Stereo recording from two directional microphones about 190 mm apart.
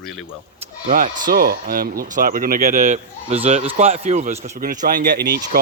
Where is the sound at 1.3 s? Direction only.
50° right (ahead or behind).